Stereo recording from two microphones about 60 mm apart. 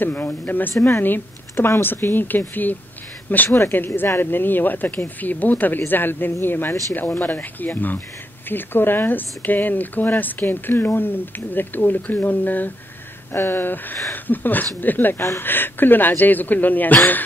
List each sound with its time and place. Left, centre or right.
0.0 s speech: left
0.7 s speech: left
3.4 s speech: left
3.7 s speech: left
15.1 s speech: left